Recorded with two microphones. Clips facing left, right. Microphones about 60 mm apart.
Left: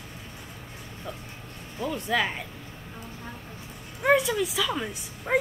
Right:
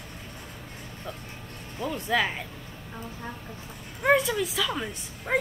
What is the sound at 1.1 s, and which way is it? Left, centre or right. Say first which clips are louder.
Vehicle: left 1 dB; centre.